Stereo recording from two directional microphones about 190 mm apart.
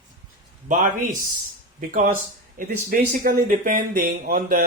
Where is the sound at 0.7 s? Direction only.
40° right (ahead or behind).